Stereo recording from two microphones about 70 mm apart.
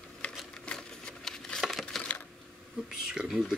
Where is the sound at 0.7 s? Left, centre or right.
Centre.